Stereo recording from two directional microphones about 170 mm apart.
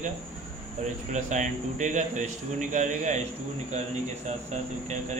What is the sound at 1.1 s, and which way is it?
Speech, 45° right (ahead or behind).